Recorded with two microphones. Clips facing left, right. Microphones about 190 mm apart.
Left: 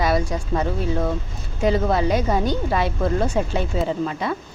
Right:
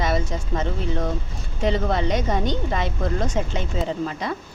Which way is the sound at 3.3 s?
35° left (ahead or behind).